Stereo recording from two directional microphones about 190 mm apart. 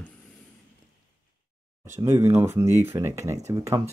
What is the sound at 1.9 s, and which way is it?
Speech, 15° right (ahead or behind).